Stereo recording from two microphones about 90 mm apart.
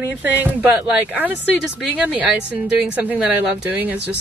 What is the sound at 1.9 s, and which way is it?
Speech, 10° right (ahead or behind).